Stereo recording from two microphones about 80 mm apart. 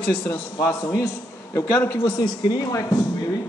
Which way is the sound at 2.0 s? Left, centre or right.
Left.